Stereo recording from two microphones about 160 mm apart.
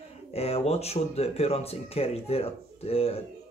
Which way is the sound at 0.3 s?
40° left (ahead or behind).